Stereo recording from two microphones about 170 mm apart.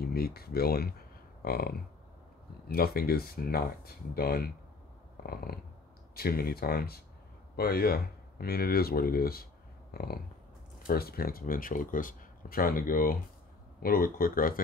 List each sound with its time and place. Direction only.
0.1 s speech: 65° left (ahead or behind)